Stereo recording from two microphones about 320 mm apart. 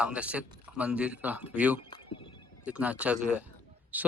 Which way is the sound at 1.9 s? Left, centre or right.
Centre.